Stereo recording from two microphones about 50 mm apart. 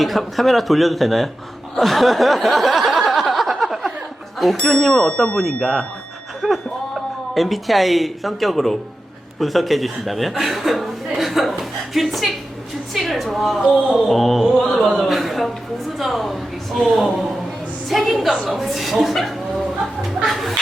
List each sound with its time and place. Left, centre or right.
0.0 s speech: centre
1.7 s a sound: centre
4.4 s speech: centre
6.4 s music: centre
6.9 s a woman's voice: centre
20.1 s chicken: centre